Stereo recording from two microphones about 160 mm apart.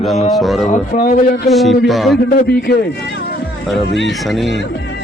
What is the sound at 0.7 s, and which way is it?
Speech, 50° left (ahead or behind).